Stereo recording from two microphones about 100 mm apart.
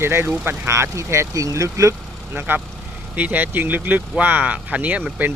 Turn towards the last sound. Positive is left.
turn(degrees=-15)  # may be behind; listen again after turning